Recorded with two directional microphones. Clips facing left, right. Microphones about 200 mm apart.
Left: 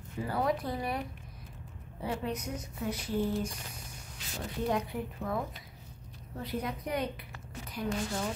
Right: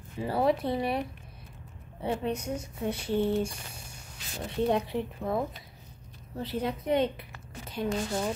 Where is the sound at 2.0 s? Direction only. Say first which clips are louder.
Right 4 dB; 30° right (ahead or behind).